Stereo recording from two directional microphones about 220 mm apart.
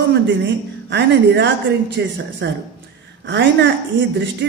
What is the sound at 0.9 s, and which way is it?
A woman's voice, 50° right (ahead or behind).